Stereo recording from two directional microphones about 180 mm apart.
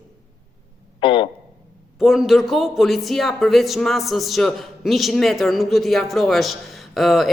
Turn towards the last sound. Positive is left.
turn(degrees=0)  # may be behind; listen again after turning